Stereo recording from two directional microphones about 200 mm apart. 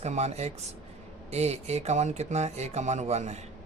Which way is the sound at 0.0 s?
35° right (ahead or behind).